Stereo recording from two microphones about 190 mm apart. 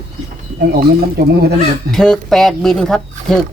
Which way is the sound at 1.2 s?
55° right (ahead or behind).